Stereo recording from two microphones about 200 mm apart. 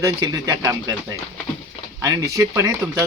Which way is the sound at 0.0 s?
20° right (ahead or behind).